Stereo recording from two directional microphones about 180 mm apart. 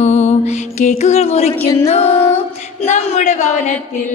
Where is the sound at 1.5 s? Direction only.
15° left (ahead or behind).